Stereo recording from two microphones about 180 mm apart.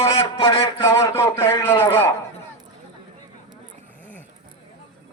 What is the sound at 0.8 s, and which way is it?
A man's voice, 15° left (ahead or behind).